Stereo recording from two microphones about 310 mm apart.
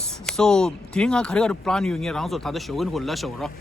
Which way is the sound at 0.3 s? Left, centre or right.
Centre.